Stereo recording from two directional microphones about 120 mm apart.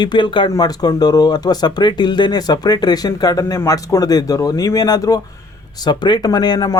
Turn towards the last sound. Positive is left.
turn(degrees=35)  # may be behind; listen again after turning